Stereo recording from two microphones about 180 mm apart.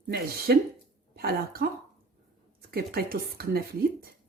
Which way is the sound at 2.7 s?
60° right (ahead or behind).